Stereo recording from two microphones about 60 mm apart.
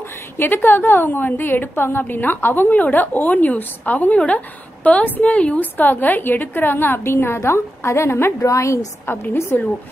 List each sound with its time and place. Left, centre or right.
0.4 s a woman's voice: left
9.0 s a woman's voice: left